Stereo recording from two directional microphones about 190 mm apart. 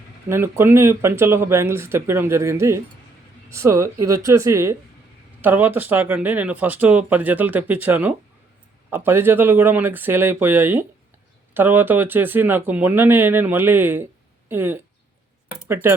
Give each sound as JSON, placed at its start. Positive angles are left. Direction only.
{"t": 0.3, "sound": "speech", "side_deg": -15}